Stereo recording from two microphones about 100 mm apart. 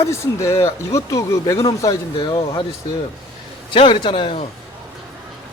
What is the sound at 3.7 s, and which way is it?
Speech, 55° left (ahead or behind).